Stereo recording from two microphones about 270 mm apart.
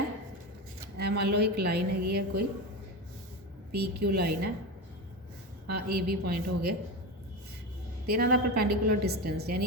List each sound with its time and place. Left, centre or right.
0.9 s a woman's voice: right
3.7 s a woman's voice: right
5.7 s a woman's voice: right
8.0 s a woman's voice: right